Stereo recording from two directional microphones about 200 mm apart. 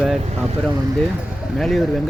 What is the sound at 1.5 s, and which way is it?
Speech, centre (ahead or behind).